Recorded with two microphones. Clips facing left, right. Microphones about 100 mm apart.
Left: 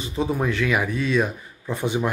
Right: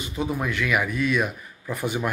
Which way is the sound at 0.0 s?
30° left (ahead or behind).